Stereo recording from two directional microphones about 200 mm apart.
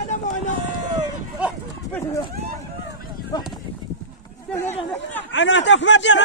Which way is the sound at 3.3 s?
20° left (ahead or behind).